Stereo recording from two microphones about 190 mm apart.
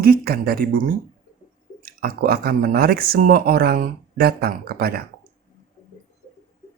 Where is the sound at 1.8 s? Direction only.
50° right (ahead or behind).